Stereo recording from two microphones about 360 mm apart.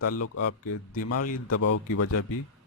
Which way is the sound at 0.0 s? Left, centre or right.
Left.